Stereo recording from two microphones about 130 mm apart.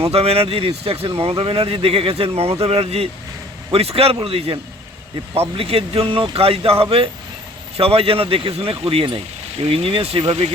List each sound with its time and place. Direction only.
0.0 s speech: 50° right (ahead or behind)
5.5 s speech: 45° right (ahead or behind)